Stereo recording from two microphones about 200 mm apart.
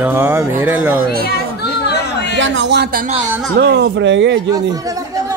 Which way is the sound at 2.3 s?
65° right (ahead or behind).